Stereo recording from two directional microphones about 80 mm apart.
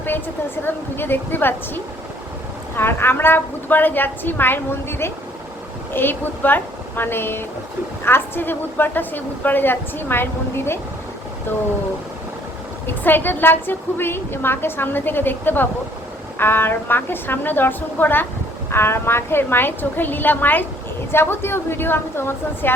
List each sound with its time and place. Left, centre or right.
0.6 s a woman's voice: left
12.9 s a woman's voice: left